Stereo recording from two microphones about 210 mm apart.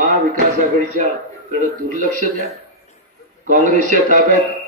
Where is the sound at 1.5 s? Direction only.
40° right (ahead or behind).